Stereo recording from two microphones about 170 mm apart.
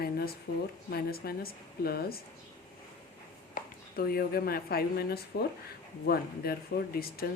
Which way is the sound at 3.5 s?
60° left (ahead or behind).